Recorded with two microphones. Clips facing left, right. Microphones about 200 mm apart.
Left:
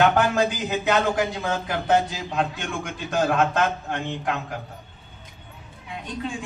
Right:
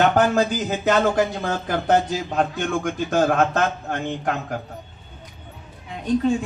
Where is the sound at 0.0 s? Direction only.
45° right (ahead or behind).